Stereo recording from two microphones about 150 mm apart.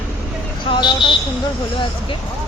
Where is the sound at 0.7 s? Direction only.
30° left (ahead or behind).